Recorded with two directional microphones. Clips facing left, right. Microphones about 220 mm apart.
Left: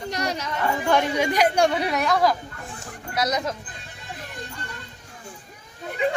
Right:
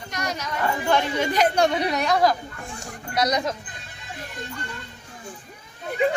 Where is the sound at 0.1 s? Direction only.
30° left (ahead or behind).